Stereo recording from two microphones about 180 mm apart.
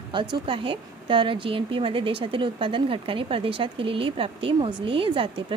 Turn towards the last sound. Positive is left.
turn(degrees=-30)  # may be behind; listen again after turning